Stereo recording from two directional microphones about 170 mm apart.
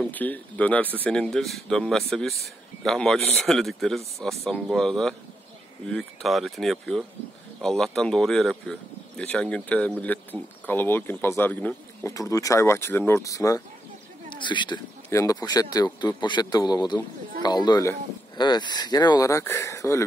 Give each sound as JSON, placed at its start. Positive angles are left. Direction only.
{"t": 0.0, "sound": "speech", "side_deg": 10}